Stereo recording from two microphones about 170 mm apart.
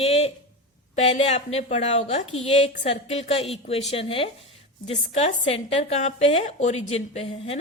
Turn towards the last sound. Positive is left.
turn(degrees=35)  # may be behind; listen again after turning